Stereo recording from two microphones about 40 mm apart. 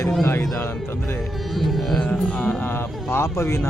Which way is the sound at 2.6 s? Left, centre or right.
Left.